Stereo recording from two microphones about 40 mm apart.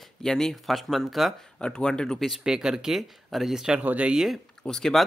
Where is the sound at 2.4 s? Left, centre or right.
Centre.